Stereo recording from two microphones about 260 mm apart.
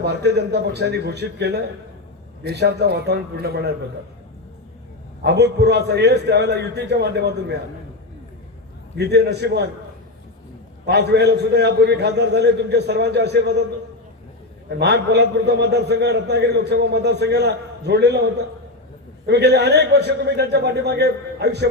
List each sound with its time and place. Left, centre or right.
0.0 s a man's voice: right
5.2 s a man's voice: right
9.0 s a man's voice: right
10.8 s a man's voice: right
14.7 s a man's voice: right